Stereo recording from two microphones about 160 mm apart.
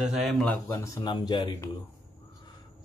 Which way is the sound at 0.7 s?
15° left (ahead or behind).